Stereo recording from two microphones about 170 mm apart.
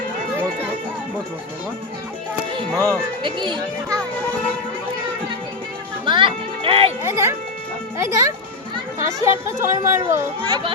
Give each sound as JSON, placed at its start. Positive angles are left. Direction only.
{"t": 2.5, "sound": "music", "side_deg": -25}
{"t": 3.2, "sound": "a child's voice", "side_deg": -30}
{"t": 6.1, "sound": "music", "side_deg": -30}
{"t": 7.0, "sound": "speech", "side_deg": -15}